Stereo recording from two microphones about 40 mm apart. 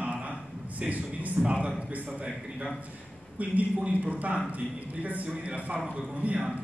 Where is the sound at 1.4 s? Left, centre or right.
Right.